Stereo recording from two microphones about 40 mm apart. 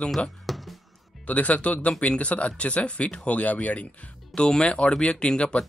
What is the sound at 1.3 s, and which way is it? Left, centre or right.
Speech, left.